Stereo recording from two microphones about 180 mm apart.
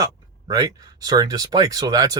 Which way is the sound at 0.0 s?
20° right (ahead or behind).